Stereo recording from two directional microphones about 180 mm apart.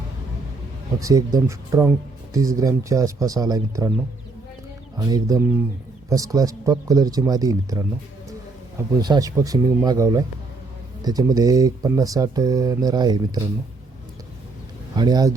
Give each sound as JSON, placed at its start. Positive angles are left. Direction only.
{"t": 0.9, "sound": "speech", "side_deg": -20}
{"t": 4.9, "sound": "speech", "side_deg": -20}
{"t": 9.0, "sound": "speech", "side_deg": -20}
{"t": 14.9, "sound": "speech", "side_deg": -20}